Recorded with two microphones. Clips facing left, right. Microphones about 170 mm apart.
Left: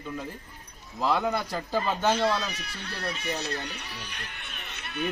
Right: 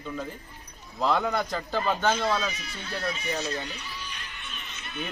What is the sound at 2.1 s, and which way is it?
Speech, 65° left (ahead or behind).